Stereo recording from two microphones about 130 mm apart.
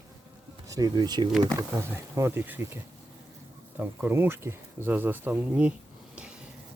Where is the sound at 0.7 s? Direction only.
30° right (ahead or behind).